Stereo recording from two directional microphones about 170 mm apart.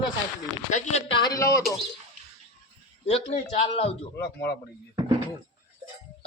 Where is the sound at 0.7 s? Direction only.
45° left (ahead or behind).